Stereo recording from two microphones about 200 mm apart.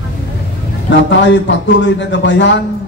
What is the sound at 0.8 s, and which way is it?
A man's voice, 65° left (ahead or behind).